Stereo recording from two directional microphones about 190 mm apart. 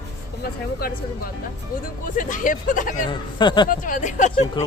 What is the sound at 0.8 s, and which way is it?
Speech, 50° left (ahead or behind).